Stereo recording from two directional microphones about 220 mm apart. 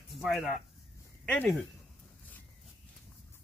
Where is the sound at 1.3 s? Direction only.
5° left (ahead or behind).